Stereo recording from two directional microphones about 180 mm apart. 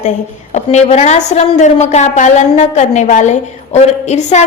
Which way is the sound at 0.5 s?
40° left (ahead or behind).